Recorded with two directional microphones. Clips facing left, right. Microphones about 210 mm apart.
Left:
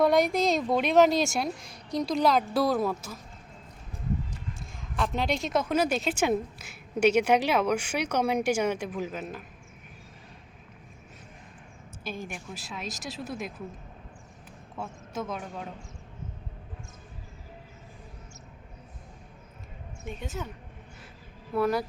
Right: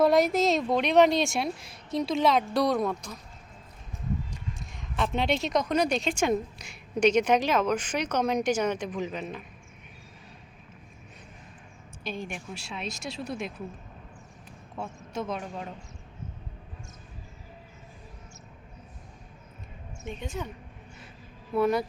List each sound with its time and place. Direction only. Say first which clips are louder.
0.0 s speech: right 1 dB; centre (ahead or behind)
4.6 s a sound: even; centre (ahead or behind)
5.1 s a woman's voice: right 2 dB; centre (ahead or behind)
12.0 s speech: right 2 dB; 5° left (ahead or behind)
14.8 s speech: right 1 dB; centre (ahead or behind)
20.1 s speech: right 1 dB; 5° left (ahead or behind)
21.5 s speech: right 2 dB; centre (ahead or behind)